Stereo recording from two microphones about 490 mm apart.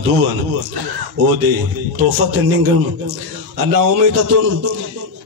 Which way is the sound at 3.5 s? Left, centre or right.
Right.